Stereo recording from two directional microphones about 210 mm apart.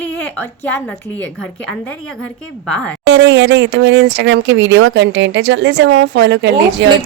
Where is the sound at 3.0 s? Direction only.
60° right (ahead or behind).